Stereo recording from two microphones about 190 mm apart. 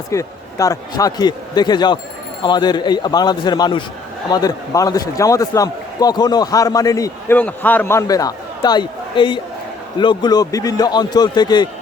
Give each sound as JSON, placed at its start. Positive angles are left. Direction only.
{"t": 0.1, "sound": "a man's voice", "side_deg": 15}